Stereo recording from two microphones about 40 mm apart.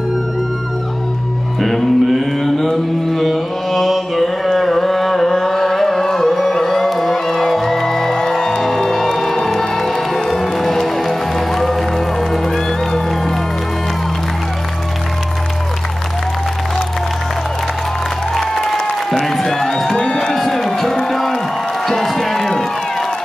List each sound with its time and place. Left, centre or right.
1.6 s music: centre
2.5 s mantra: centre
6.3 s music: centre
18.3 s applause: centre
19.2 s music: centre
20.0 s crowd: centre
20.3 s a sound: centre
21.8 s music: centre